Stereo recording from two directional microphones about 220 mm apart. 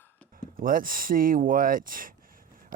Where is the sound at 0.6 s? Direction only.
40° right (ahead or behind).